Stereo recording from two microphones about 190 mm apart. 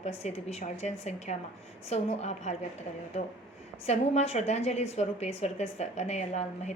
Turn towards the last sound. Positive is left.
turn(degrees=35)  # may be behind; listen again after turning